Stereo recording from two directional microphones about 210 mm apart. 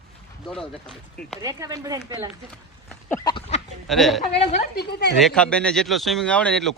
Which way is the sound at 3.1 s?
20° left (ahead or behind).